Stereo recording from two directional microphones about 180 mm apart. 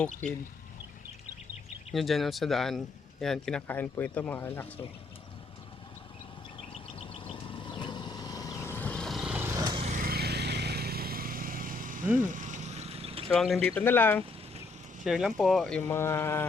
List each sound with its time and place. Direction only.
0.2 s speech: 5° left (ahead or behind)
1.9 s speech: centre (ahead or behind)
6.6 s vehicle: 30° left (ahead or behind); by 9.8 s 20° right (ahead or behind)
9.8 s vehicle: 50° right (ahead or behind); by 13.2 s 35° right (ahead or behind)
13.2 s speech: centre (ahead or behind)
15.0 s speech: centre (ahead or behind)
16.0 s speech: 15° left (ahead or behind)